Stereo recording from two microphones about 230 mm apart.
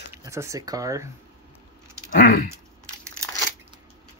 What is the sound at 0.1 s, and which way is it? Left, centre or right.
Speech, centre.